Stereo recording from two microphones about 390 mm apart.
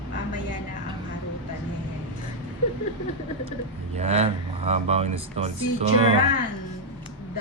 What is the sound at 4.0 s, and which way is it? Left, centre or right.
Speech, centre.